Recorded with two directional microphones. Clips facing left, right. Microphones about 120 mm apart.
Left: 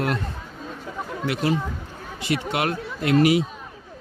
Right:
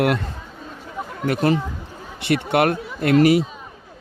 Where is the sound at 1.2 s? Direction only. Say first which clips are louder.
Right 5 dB; 45° right (ahead or behind).